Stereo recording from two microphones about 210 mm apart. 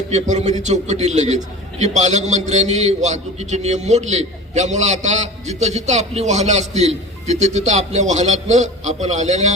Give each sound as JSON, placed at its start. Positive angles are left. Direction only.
{"t": 0.1, "sound": "a man's voice", "side_deg": -30}